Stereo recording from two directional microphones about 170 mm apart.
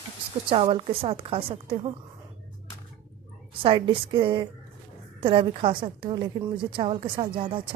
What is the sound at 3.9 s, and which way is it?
A woman's voice, 30° right (ahead or behind).